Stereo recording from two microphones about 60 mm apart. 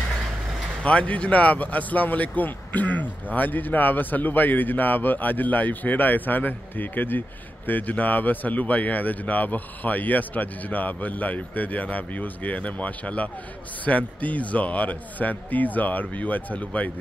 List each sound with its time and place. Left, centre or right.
0.8 s speech: left